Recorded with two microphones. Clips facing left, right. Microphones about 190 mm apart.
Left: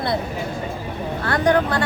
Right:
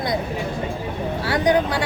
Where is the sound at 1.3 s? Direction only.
10° right (ahead or behind).